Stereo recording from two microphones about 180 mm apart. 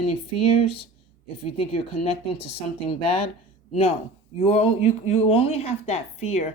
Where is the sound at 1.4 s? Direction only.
30° left (ahead or behind).